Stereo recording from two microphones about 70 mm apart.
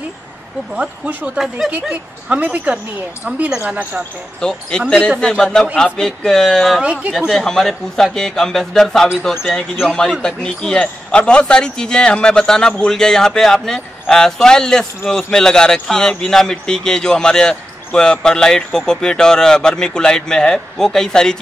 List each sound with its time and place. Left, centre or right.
0.7 s a woman's voice: right
4.4 s speech: centre
6.8 s speech: centre
7.2 s speech: centre
9.3 s speech: centre
10.2 s speech: centre